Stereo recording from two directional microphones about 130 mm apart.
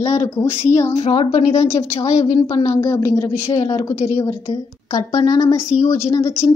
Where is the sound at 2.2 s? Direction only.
30° left (ahead or behind).